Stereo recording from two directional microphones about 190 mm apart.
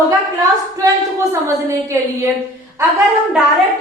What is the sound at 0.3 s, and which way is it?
A woman's voice, 15° right (ahead or behind).